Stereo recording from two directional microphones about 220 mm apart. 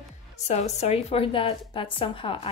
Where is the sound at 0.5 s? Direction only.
30° left (ahead or behind).